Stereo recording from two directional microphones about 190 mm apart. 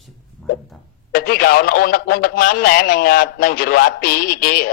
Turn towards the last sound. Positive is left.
turn(degrees=50)  # may be behind; listen again after turning